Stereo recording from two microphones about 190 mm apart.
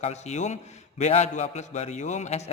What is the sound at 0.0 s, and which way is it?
A man's voice, 35° left (ahead or behind).